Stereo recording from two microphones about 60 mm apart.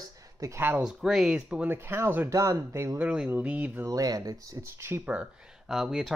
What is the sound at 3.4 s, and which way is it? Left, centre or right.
Speech, right.